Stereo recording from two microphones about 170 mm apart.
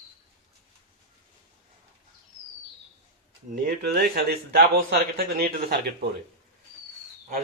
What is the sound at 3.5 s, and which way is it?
A man's voice, 70° right (ahead or behind).